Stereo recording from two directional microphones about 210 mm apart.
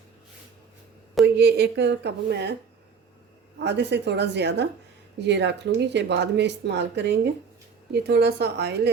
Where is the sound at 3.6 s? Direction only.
55° right (ahead or behind).